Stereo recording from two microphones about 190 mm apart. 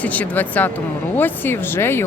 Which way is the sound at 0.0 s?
10° left (ahead or behind).